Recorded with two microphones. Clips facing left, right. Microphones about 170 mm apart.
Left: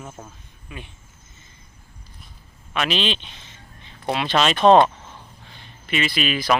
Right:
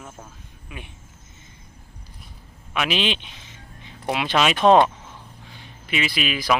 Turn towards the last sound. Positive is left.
turn(degrees=-5)  # may be behind; listen again after turning